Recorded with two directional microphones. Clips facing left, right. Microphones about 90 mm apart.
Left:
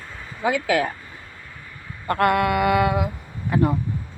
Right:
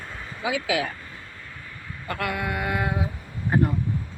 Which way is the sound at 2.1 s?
55° left (ahead or behind).